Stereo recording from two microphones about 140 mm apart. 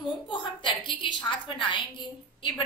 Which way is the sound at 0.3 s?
35° left (ahead or behind).